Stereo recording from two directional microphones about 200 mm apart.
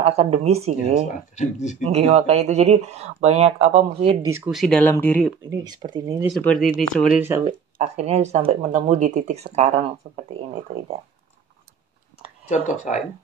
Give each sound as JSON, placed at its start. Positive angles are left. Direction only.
{"t": 0.0, "sound": "speech", "side_deg": -30}
{"t": 1.3, "sound": "speech", "side_deg": 35}
{"t": 1.9, "sound": "speech", "side_deg": -35}
{"t": 4.3, "sound": "speech", "side_deg": -5}
{"t": 5.5, "sound": "speech", "side_deg": -20}
{"t": 6.3, "sound": "speech", "side_deg": 0}
{"t": 7.4, "sound": "speech", "side_deg": -25}
{"t": 12.6, "sound": "speech", "side_deg": 40}